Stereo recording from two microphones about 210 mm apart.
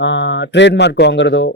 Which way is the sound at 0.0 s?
60° left (ahead or behind).